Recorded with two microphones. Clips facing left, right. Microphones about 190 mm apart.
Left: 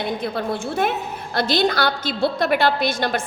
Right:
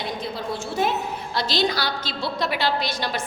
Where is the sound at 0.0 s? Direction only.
55° left (ahead or behind).